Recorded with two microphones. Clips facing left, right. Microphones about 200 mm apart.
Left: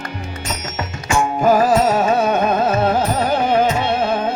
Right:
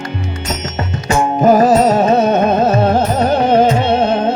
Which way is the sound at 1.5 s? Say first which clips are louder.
Right 4 dB; 40° right (ahead or behind).